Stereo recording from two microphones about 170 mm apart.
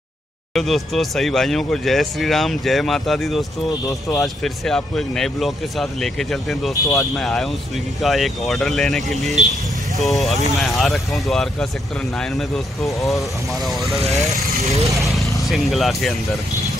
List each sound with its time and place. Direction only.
0.6 s speech: centre (ahead or behind)
15.2 s vehicle: 20° left (ahead or behind)
15.5 s speech: centre (ahead or behind)